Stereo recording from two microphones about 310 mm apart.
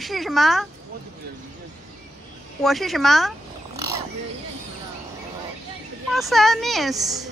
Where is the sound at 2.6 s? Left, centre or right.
Centre.